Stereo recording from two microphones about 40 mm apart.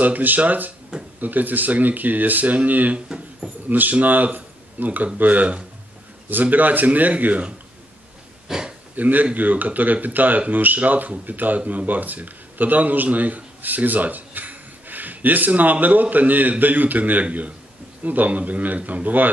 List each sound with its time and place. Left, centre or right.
0.0 s speech: right
8.5 s speech: centre
8.9 s speech: right